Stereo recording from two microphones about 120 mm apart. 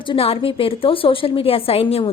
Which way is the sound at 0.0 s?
50° left (ahead or behind).